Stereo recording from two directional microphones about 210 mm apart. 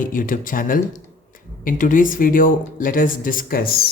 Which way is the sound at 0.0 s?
40° left (ahead or behind).